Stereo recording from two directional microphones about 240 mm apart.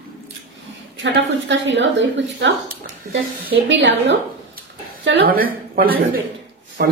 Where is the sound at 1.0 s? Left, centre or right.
Right.